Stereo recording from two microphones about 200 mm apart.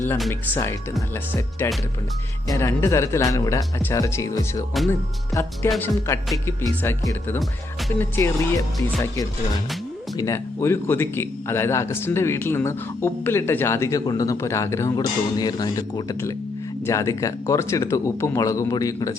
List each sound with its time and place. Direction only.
0.3 s speech: 15° left (ahead or behind)
5.7 s speech: 5° left (ahead or behind)
10.2 s speech: 15° left (ahead or behind)